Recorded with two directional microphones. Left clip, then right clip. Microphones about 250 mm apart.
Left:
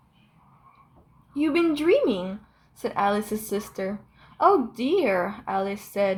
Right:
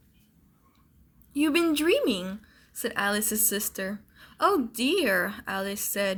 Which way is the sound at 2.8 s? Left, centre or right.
Right.